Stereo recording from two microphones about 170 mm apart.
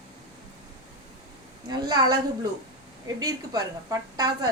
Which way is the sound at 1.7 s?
25° right (ahead or behind).